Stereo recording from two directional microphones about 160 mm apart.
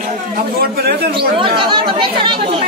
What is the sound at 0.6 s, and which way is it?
Speech, 80° right.